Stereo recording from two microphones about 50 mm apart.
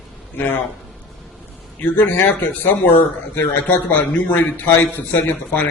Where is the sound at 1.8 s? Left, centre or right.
Left.